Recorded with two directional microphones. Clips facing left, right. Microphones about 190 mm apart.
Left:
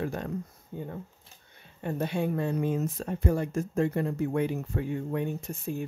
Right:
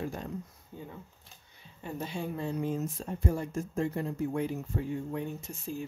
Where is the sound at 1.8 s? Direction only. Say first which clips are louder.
Left 7 dB; 65° left (ahead or behind).